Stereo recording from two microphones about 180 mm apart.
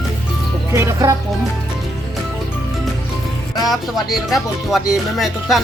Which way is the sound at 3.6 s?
Centre (ahead or behind).